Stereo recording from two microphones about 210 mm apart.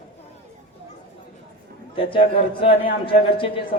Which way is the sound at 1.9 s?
25° left (ahead or behind).